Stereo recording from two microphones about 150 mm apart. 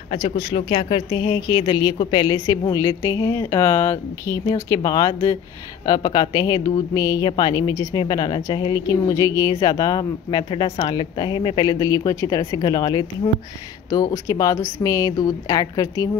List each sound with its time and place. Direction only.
0.1 s a woman's voice: 35° left (ahead or behind)
2.4 s speech: 25° left (ahead or behind)